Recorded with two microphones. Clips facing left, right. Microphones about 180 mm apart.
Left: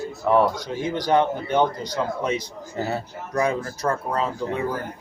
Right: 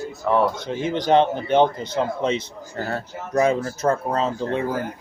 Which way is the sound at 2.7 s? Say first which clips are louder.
Left 1 dB; 5° left (ahead or behind).